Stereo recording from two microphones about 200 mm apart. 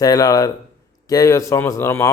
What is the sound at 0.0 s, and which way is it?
Speech, 20° left (ahead or behind).